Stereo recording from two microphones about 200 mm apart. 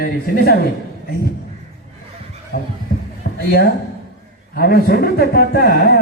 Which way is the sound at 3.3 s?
55° left (ahead or behind).